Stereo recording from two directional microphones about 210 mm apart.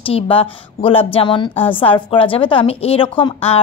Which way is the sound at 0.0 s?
25° left (ahead or behind).